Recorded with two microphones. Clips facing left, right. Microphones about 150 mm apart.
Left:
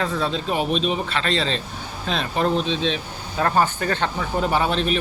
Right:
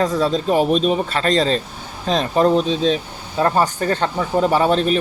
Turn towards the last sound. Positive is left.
turn(degrees=-40)  # may be behind; listen again after turning